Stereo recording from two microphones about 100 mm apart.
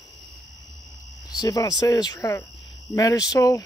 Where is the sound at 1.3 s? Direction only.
40° left (ahead or behind).